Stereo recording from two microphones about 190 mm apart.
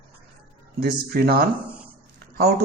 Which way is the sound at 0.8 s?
55° right (ahead or behind).